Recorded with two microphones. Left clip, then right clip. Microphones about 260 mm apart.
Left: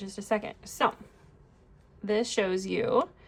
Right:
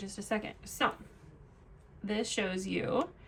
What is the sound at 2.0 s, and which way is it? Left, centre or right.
Speech, left.